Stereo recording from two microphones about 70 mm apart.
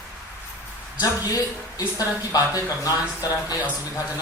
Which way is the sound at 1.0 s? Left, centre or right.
Left.